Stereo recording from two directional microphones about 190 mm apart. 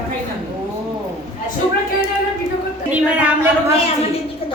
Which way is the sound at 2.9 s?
10° right (ahead or behind).